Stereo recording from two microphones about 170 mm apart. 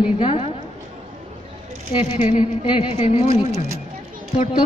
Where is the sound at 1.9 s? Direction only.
30° left (ahead or behind).